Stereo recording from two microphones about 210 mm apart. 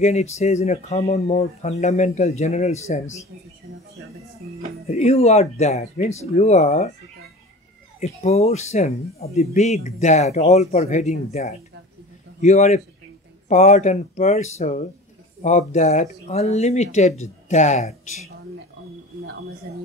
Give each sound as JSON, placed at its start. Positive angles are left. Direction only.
{"t": 0.0, "sound": "speech", "side_deg": 30}
{"t": 4.8, "sound": "speech", "side_deg": 30}
{"t": 8.0, "sound": "speech", "side_deg": 30}